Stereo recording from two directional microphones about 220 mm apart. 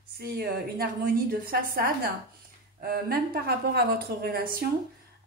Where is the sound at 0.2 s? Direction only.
45° right (ahead or behind).